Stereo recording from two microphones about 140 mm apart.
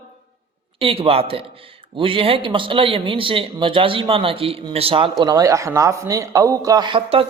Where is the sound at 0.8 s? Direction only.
40° right (ahead or behind).